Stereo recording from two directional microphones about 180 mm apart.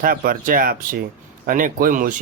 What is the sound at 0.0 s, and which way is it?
Speech, 55° right (ahead or behind).